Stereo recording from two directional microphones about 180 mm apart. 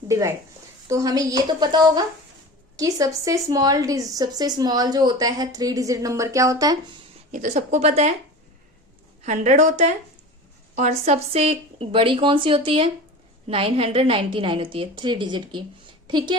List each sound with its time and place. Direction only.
0.1 s a woman's voice: 15° right (ahead or behind)
7.3 s a woman's voice: 45° right (ahead or behind)
9.2 s a woman's voice: 45° right (ahead or behind); by 16.4 s 25° right (ahead or behind)